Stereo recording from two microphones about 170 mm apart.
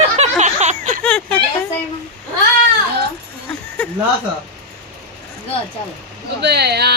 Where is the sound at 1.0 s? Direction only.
5° left (ahead or behind).